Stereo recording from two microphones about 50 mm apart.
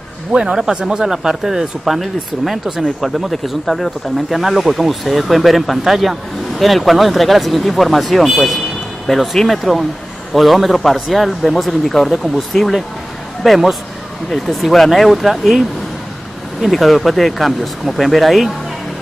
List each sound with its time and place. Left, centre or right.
0.3 s speech: centre
16.7 s speech: centre